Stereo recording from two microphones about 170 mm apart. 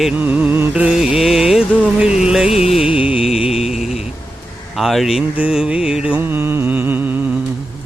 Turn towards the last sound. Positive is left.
turn(degrees=-10)  # may be behind; listen again after turning